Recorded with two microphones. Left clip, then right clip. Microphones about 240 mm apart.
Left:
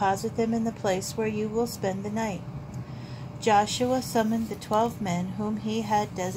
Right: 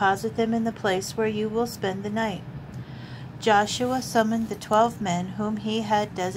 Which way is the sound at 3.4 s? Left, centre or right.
Right.